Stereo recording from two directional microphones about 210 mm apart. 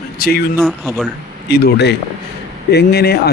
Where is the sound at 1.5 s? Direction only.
50° left (ahead or behind).